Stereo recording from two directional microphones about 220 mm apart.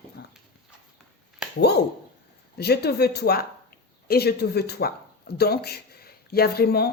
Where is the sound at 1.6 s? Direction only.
50° left (ahead or behind).